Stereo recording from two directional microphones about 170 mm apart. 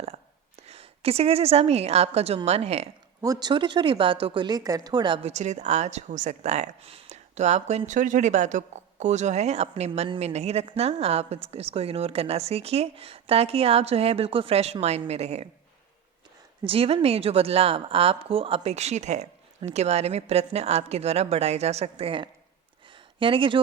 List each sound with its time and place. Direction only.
0.7 s speech: 35° right (ahead or behind)
3.2 s speech: 25° right (ahead or behind); by 15.4 s 40° right (ahead or behind)
16.6 s speech: 35° right (ahead or behind)